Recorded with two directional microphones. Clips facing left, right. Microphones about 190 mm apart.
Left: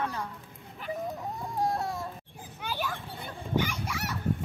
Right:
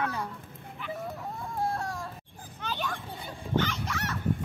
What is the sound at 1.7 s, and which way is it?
Child singing, 20° left (ahead or behind).